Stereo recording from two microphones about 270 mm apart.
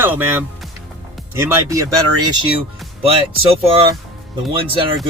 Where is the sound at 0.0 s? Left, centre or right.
Centre.